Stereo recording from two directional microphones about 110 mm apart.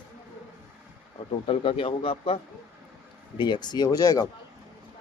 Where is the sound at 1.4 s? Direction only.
55° left (ahead or behind).